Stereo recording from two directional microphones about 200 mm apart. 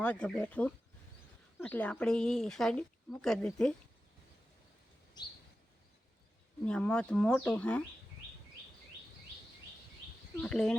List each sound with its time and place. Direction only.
0.0 s speech: 5° left (ahead or behind)
6.7 s speech: 5° left (ahead or behind)
10.3 s speech: 5° left (ahead or behind)